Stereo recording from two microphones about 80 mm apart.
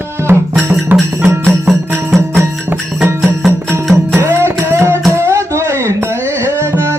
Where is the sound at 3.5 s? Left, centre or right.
Right.